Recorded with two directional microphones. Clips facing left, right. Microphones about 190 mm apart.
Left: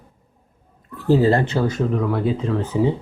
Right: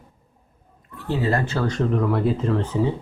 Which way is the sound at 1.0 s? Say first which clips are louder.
Left 7 dB; 35° left (ahead or behind).